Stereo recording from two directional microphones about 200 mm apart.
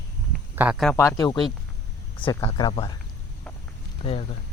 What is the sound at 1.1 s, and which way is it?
Speech, 20° left (ahead or behind).